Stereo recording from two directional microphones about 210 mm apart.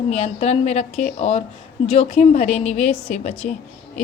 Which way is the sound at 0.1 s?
30° left (ahead or behind).